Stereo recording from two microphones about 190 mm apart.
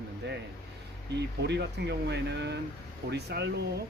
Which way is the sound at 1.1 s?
60° right (ahead or behind).